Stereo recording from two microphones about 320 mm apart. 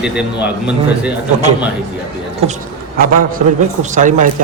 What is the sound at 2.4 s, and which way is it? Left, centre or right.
A man's voice, right.